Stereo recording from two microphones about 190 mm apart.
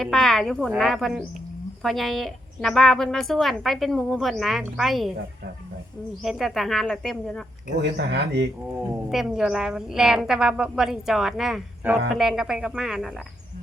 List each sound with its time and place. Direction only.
0.0 s a woman's voice: centre (ahead or behind)
6.2 s a woman's voice: centre (ahead or behind)
7.8 s speech: 60° right (ahead or behind)
9.0 s a woman's voice: 5° right (ahead or behind)